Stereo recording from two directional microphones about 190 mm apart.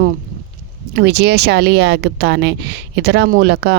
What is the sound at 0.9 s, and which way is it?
Speech, 60° right (ahead or behind).